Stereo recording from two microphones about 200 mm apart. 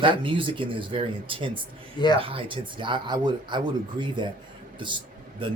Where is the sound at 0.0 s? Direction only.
25° right (ahead or behind).